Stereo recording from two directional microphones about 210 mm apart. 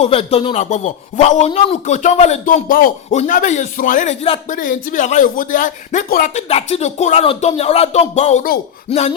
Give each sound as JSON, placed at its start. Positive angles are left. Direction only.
{"t": 0.0, "sound": "a man's voice", "side_deg": 30}